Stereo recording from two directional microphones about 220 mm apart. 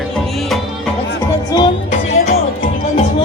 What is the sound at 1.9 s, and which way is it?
Music, 35° left (ahead or behind).